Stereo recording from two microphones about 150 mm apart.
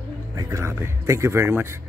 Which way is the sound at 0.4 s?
20° right (ahead or behind).